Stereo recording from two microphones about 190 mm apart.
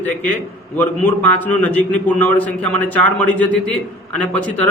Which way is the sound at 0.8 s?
10° left (ahead or behind).